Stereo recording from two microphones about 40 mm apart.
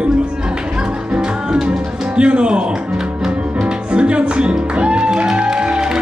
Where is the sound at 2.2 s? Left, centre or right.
Right.